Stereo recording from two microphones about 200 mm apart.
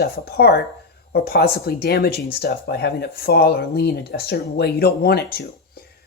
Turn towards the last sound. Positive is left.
turn(degrees=50)  # may be behind; listen again after turning